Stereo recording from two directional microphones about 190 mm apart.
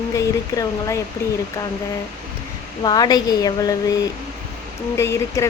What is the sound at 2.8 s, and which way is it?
Speech, 20° left (ahead or behind).